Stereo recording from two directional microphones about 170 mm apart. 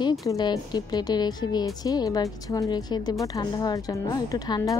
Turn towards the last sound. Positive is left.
turn(degrees=20)  # may be behind; listen again after turning